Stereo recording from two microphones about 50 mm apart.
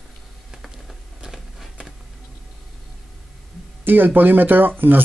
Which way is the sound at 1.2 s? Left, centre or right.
Centre.